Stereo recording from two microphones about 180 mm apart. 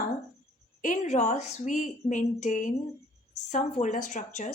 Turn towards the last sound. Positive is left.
turn(degrees=45)  # may be behind; listen again after turning